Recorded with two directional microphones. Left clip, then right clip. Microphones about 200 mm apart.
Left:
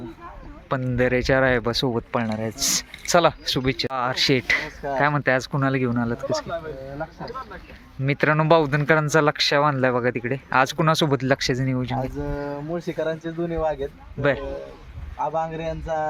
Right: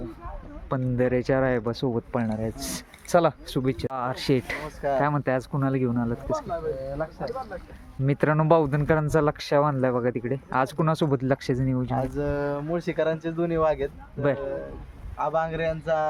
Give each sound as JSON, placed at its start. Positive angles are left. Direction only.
{"t": 0.7, "sound": "speech", "side_deg": -5}
{"t": 8.0, "sound": "speech", "side_deg": -15}
{"t": 12.5, "sound": "speech", "side_deg": -20}
{"t": 14.2, "sound": "speech", "side_deg": -5}
{"t": 15.5, "sound": "speech", "side_deg": 5}